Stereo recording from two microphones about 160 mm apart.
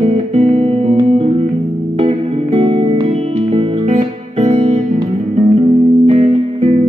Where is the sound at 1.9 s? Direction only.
40° right (ahead or behind).